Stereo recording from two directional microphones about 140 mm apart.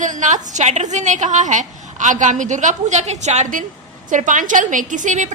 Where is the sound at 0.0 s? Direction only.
65° right (ahead or behind).